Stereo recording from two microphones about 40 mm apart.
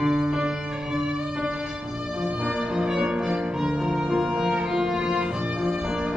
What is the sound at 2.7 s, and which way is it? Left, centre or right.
Music, centre.